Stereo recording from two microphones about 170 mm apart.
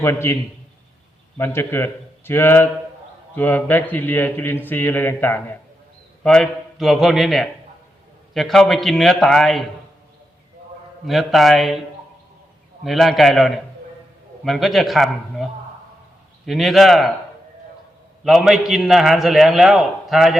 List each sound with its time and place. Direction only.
0.0 s a man's voice: 15° left (ahead or behind)
1.4 s a man's voice: 15° left (ahead or behind)
11.0 s a man's voice: centre (ahead or behind)
12.8 s a man's voice: centre (ahead or behind)
16.5 s a man's voice: centre (ahead or behind)
18.2 s a man's voice: centre (ahead or behind)